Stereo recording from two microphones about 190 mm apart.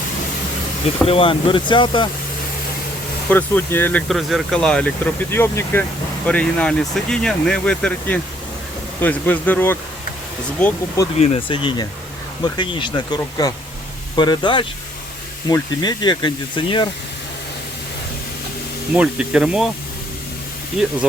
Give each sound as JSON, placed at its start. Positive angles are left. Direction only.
{"t": 1.0, "sound": "speech", "side_deg": 30}
{"t": 3.2, "sound": "speech", "side_deg": 10}
{"t": 4.1, "sound": "speech", "side_deg": 0}
{"t": 11.2, "sound": "speech", "side_deg": 30}
{"t": 18.9, "sound": "speech", "side_deg": -5}
{"t": 20.8, "sound": "speech", "side_deg": -5}